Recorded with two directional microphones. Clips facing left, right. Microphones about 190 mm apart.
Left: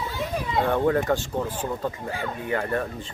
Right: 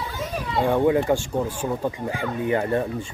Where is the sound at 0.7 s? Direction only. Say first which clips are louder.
Right 4 dB; 15° right (ahead or behind).